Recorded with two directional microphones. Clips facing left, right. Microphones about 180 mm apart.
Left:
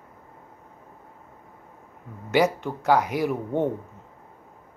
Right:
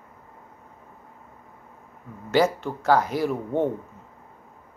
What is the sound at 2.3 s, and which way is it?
Speech, 15° left (ahead or behind).